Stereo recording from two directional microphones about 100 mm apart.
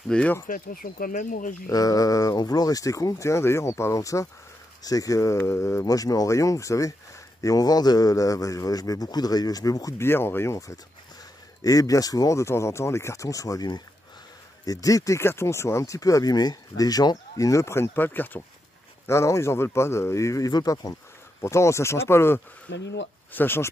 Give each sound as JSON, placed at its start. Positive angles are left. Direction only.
{"t": 0.1, "sound": "speech", "side_deg": 10}
{"t": 1.7, "sound": "speech", "side_deg": 35}
{"t": 10.0, "sound": "speech", "side_deg": 25}
{"t": 14.7, "sound": "speech", "side_deg": 35}
{"t": 19.0, "sound": "speech", "side_deg": 30}